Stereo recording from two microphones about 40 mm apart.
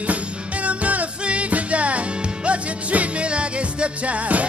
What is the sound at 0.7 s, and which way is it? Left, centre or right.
Music, right.